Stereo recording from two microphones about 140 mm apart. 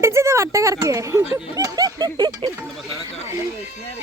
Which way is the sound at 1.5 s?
25° right (ahead or behind).